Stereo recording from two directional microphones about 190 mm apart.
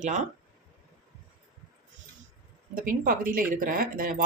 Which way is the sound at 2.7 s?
45° right (ahead or behind).